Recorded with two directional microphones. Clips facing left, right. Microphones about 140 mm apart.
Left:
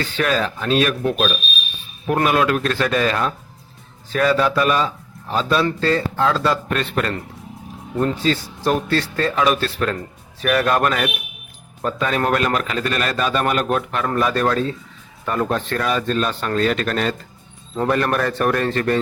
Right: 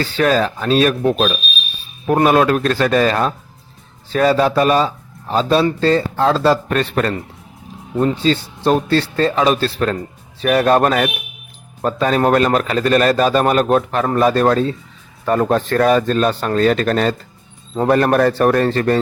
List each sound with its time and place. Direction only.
0.0 s a man's voice: 35° right (ahead or behind)
7.9 s a man's voice: 20° right (ahead or behind)